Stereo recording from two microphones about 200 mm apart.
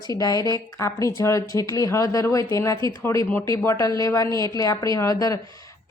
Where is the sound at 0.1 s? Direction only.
15° left (ahead or behind).